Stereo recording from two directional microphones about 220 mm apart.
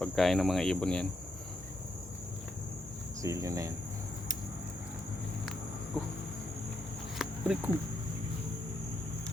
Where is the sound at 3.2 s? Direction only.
15° right (ahead or behind).